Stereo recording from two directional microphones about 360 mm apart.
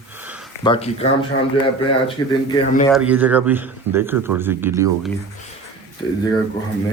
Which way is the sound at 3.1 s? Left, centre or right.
Centre.